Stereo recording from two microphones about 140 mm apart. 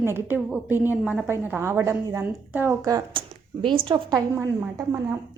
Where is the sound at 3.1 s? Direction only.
35° right (ahead or behind).